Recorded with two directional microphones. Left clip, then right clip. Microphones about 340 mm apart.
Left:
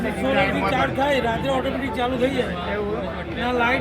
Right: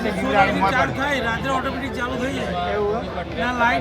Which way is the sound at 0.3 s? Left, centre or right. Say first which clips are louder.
Right 5 dB; right.